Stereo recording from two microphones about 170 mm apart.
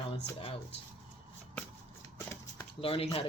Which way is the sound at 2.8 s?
35° left (ahead or behind).